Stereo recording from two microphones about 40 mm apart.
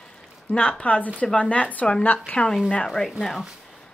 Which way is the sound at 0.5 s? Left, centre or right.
Left.